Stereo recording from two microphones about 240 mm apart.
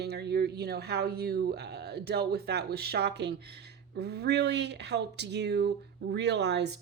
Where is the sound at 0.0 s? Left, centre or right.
Right.